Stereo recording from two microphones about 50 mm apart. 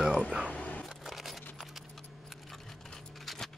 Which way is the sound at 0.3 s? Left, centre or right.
Right.